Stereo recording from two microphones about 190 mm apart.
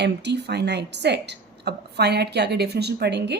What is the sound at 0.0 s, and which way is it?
A woman's voice, 65° right (ahead or behind).